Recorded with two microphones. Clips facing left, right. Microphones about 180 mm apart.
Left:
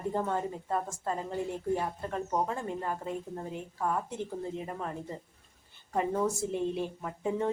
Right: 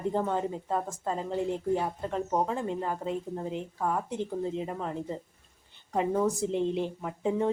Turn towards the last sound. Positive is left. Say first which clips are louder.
# right 3 dB
turn(degrees=-15)  # may be behind; listen again after turning